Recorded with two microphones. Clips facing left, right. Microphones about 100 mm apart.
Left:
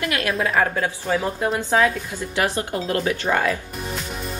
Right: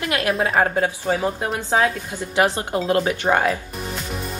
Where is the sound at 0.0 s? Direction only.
30° right (ahead or behind).